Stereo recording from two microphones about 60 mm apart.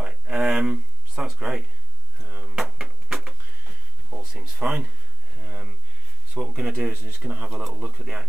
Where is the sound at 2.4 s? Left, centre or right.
Centre.